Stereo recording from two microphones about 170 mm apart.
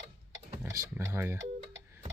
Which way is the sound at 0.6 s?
15° right (ahead or behind).